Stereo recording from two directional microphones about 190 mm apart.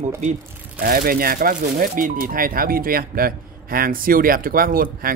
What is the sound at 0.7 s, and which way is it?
Speech, 50° right (ahead or behind).